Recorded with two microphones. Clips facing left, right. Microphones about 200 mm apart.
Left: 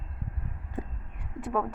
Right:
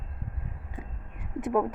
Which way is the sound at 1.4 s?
20° right (ahead or behind).